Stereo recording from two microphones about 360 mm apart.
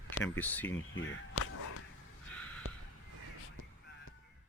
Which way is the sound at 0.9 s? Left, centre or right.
Left.